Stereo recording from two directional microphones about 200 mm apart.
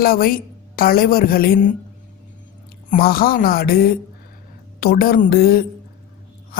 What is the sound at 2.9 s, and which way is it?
A woman's voice, 50° left (ahead or behind).